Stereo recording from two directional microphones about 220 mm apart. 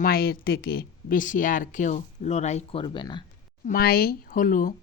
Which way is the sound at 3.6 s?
40° left (ahead or behind).